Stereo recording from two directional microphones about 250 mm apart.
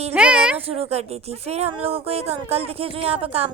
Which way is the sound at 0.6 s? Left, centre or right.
Right.